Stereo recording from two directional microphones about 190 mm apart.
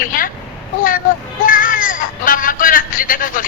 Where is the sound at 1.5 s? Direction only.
45° left (ahead or behind).